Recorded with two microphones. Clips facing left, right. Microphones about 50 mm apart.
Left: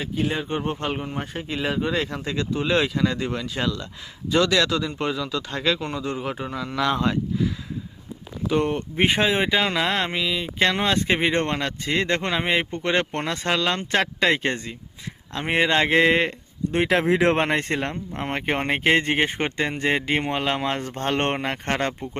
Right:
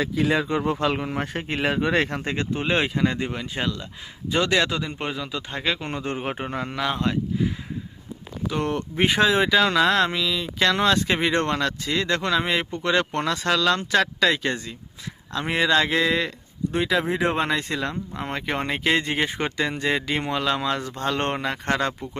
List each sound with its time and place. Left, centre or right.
0.3 s speech: right; by 5.8 s centre
5.8 s a man's voice: right
6.7 s speech: centre
8.4 s speech: centre; by 16.3 s left
16.7 s speech: left
17.4 s speech: left